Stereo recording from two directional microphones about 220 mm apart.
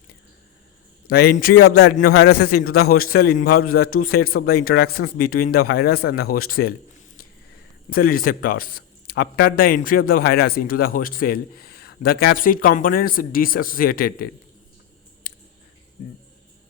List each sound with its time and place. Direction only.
1.0 s a man's voice: 45° left (ahead or behind)
7.9 s a man's voice: 40° left (ahead or behind)
15.3 s clicking: 40° left (ahead or behind)